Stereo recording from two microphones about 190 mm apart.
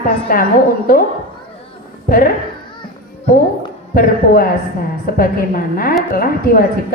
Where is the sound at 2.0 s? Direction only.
50° left (ahead or behind).